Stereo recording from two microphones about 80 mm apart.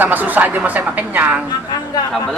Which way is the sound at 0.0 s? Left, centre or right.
Right.